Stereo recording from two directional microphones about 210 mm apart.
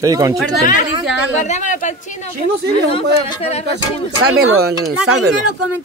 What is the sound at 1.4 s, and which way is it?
Speech, 35° left (ahead or behind).